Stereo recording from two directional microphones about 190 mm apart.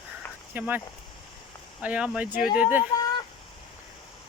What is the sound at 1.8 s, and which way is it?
Speech, 5° right (ahead or behind).